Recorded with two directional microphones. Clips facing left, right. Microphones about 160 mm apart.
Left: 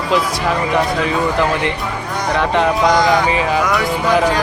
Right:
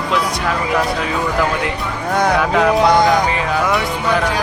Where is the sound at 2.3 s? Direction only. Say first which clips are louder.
Left 2 dB; 5° right (ahead or behind).